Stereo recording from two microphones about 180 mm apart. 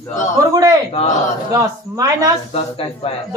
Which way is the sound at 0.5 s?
20° right (ahead or behind).